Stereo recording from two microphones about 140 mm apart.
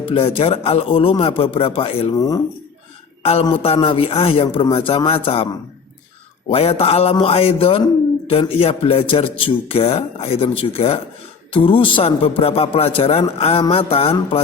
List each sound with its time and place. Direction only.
0.0 s speech: 40° left (ahead or behind)
2.1 s speech: 25° left (ahead or behind)
3.5 s a man's voice: 45° left (ahead or behind)
6.5 s a man's voice: 45° left (ahead or behind)